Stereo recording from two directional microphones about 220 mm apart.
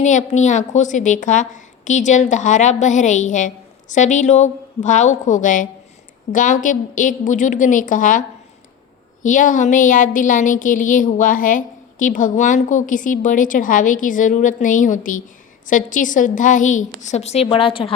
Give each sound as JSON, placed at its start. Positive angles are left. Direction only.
{"t": 0.0, "sound": "speech", "side_deg": 35}
{"t": 9.2, "sound": "speech", "side_deg": 35}